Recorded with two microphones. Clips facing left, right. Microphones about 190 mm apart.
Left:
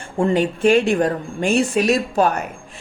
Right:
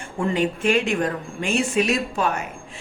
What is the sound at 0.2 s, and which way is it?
Speech, 35° left (ahead or behind).